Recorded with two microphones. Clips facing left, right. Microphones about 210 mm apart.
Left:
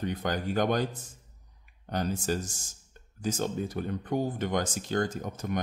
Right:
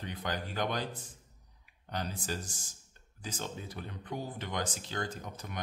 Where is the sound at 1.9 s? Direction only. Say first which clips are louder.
Left 8 dB; 45° left (ahead or behind).